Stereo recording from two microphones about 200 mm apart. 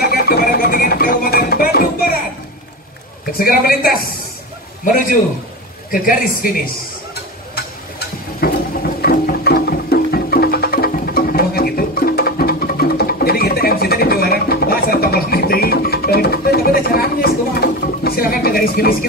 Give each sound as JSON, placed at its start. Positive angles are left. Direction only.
{"t": 0.0, "sound": "music", "side_deg": 50}
{"t": 3.3, "sound": "a man's voice", "side_deg": 50}
{"t": 5.9, "sound": "speech", "side_deg": 45}
{"t": 8.4, "sound": "sewing machine", "side_deg": 50}
{"t": 9.0, "sound": "music", "side_deg": 50}